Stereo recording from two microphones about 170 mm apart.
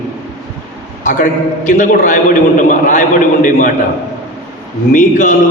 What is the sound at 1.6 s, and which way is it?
A man's voice, 50° left (ahead or behind).